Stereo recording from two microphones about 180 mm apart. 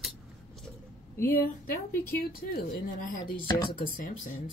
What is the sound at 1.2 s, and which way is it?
Speech, 55° left (ahead or behind).